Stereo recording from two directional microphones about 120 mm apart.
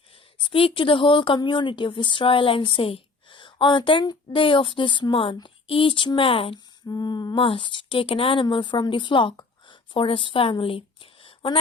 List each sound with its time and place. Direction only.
0.3 s speech: 50° left (ahead or behind)
6.8 s a sound: 35° left (ahead or behind)
7.4 s a woman's voice: 45° left (ahead or behind)